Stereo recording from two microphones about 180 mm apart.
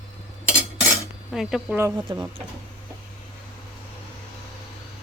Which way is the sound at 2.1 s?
25° right (ahead or behind).